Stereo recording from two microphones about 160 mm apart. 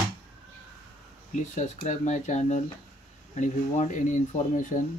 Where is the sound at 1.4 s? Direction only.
45° left (ahead or behind).